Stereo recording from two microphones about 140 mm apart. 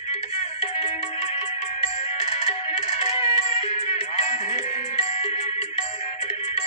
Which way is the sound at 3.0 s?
40° left (ahead or behind).